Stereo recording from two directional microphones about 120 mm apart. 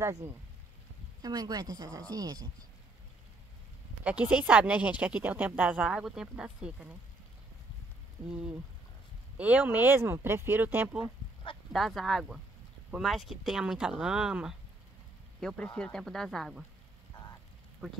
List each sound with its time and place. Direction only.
0.0 s speech: 30° right (ahead or behind)
4.0 s a woman's voice: 10° right (ahead or behind)
9.4 s a woman's voice: 10° right (ahead or behind)
11.7 s speech: centre (ahead or behind)
15.4 s speech: 5° left (ahead or behind)
17.1 s rain: 40° left (ahead or behind)